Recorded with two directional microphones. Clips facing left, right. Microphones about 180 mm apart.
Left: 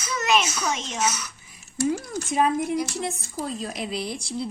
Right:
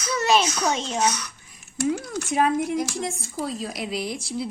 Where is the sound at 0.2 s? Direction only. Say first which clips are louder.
Right 2 dB; 30° right (ahead or behind).